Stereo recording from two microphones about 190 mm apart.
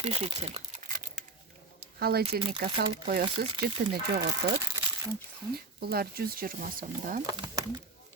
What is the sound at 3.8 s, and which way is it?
Speech, 65° right (ahead or behind).